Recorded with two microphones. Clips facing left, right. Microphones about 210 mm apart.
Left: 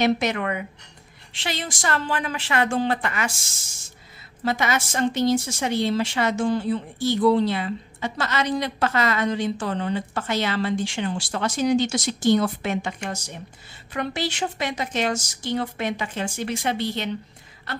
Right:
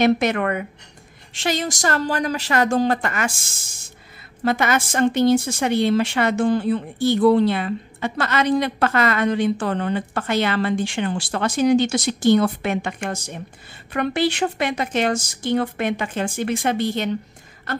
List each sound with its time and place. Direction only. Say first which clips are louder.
0.0 s a woman's voice: right 4 dB; 55° right (ahead or behind)
4.5 s a woman's voice: right 4 dB; 55° right (ahead or behind)